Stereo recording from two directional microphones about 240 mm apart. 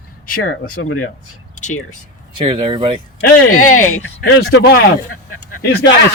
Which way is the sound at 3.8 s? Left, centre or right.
Left.